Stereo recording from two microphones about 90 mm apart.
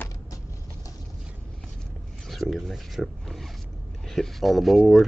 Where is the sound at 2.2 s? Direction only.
Centre (ahead or behind).